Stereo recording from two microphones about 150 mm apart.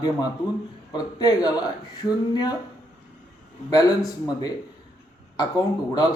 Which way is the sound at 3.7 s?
25° left (ahead or behind).